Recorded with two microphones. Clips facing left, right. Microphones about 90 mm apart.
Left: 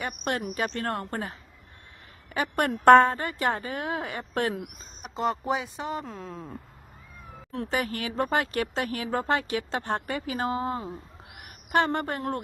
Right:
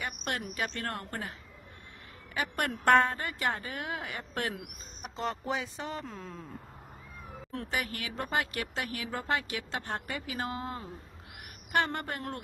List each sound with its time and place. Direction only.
0.0 s speech: 30° left (ahead or behind)
2.3 s speech: 30° left (ahead or behind)
5.1 s speech: 10° left (ahead or behind)
6.1 s speech: centre (ahead or behind)
7.7 s a woman's voice: 35° left (ahead or behind)